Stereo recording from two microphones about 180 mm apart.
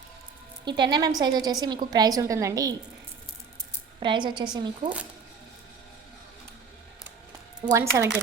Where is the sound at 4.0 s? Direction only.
25° right (ahead or behind).